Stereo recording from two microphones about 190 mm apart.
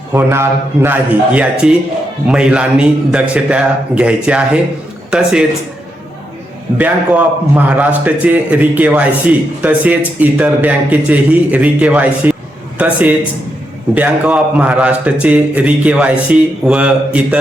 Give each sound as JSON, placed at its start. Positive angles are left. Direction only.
{"t": 0.1, "sound": "a man's voice", "side_deg": -15}
{"t": 6.7, "sound": "a man's voice", "side_deg": -5}